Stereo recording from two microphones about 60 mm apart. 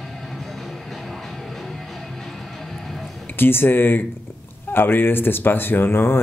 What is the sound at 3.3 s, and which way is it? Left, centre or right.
Speech, left.